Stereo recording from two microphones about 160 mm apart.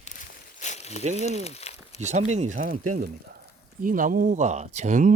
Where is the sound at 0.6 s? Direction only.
45° left (ahead or behind).